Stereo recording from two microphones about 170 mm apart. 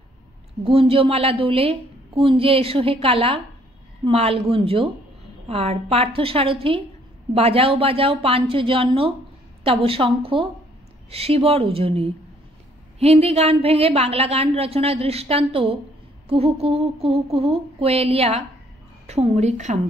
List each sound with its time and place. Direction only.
0.7 s a woman's voice: 35° right (ahead or behind)